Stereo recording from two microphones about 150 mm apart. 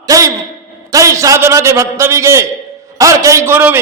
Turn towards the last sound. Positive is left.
turn(degrees=-15)  # may be behind; listen again after turning